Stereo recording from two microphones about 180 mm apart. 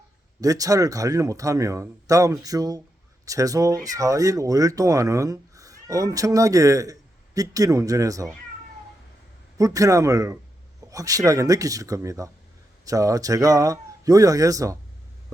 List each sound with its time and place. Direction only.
0.4 s speech: 20° right (ahead or behind)
9.6 s speech: 20° right (ahead or behind)